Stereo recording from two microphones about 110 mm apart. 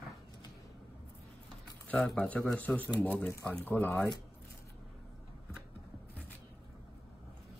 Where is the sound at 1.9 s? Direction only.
10° left (ahead or behind).